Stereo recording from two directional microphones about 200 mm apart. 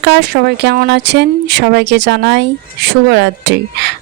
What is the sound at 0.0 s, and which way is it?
Speech, 60° right (ahead or behind).